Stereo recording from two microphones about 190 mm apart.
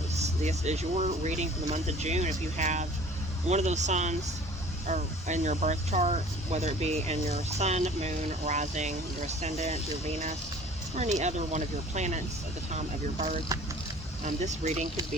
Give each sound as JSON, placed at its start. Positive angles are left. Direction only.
{"t": 0.2, "sound": "speech", "side_deg": -35}
{"t": 11.2, "sound": "speech", "side_deg": -35}